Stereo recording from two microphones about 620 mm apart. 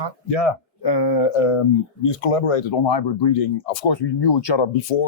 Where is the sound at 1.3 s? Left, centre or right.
Left.